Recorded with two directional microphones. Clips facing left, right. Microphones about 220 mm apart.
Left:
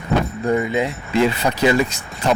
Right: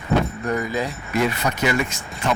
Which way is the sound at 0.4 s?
25° left (ahead or behind).